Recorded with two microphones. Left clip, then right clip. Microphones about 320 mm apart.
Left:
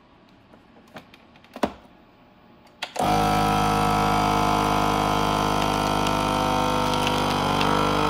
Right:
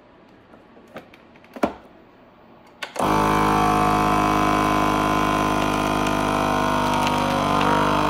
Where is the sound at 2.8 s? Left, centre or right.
Centre.